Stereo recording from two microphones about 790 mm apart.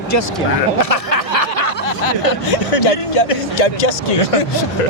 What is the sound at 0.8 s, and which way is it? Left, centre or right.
Snicker, left.